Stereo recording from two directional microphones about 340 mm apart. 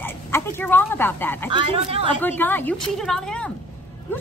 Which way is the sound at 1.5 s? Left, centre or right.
Centre.